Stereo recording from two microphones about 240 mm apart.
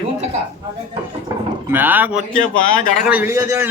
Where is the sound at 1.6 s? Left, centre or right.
Centre.